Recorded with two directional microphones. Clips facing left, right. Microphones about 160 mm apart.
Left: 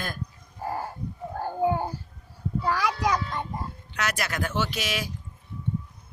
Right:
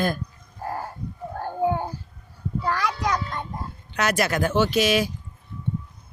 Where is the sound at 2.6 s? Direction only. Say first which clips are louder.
Even; 5° left (ahead or behind).